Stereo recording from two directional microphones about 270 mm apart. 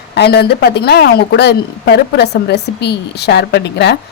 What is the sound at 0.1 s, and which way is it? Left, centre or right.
A woman's voice, left.